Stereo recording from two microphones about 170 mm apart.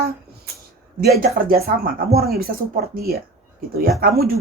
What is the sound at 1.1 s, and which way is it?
Speech, 60° right (ahead or behind).